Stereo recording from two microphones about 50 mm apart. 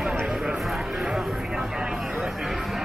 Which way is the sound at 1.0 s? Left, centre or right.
Centre.